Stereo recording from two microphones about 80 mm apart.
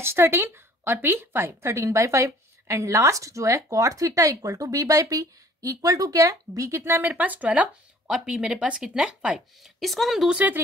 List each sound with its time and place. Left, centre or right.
0.0 s a woman's voice: right; by 9.7 s centre
9.8 s speech: centre
10.3 s speech: centre